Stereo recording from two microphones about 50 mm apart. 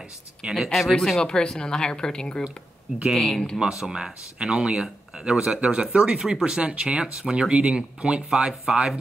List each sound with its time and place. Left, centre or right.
0.7 s speech: centre
3.5 s speech: centre
6.6 s speech: right